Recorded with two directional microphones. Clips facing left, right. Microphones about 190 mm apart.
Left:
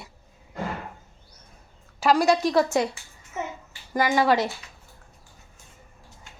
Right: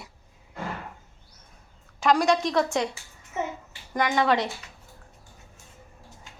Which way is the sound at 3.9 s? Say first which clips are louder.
Left 2 dB; 5° left (ahead or behind).